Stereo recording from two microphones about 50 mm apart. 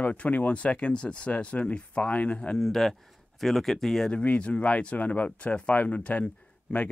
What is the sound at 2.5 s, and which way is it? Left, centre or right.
Speech, centre.